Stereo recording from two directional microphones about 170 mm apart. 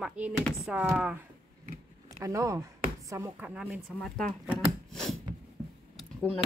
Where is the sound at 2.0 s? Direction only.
20° right (ahead or behind).